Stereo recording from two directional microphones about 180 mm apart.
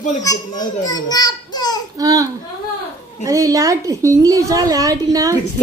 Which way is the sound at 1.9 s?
20° right (ahead or behind).